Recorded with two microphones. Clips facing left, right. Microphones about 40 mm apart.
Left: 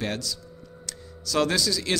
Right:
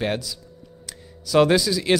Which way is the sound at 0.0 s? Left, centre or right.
Centre.